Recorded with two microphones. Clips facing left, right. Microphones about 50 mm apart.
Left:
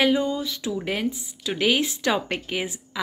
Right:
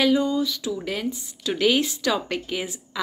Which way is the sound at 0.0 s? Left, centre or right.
Left.